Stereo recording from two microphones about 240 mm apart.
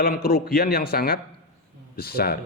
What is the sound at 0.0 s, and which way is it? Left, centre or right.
Speech, left.